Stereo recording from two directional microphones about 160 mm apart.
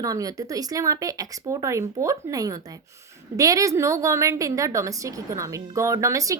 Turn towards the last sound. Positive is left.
turn(degrees=-20)  # may be behind; listen again after turning